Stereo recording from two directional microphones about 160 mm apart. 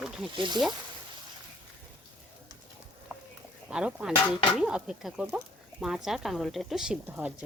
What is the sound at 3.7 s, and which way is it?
Speech, 5° right (ahead or behind).